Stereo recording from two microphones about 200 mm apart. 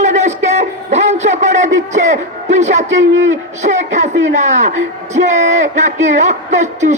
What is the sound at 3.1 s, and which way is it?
Speech, 70° right (ahead or behind).